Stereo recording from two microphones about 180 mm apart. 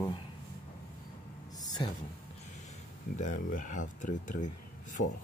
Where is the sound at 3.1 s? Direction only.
45° left (ahead or behind).